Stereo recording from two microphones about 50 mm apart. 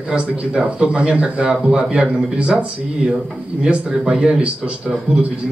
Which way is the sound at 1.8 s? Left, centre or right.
Right.